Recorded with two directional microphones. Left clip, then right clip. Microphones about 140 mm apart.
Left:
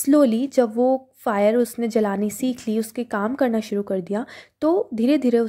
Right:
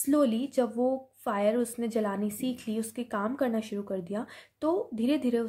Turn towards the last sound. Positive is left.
turn(degrees=45)  # may be behind; listen again after turning